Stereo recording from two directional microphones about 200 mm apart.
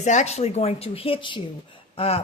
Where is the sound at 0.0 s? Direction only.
35° left (ahead or behind).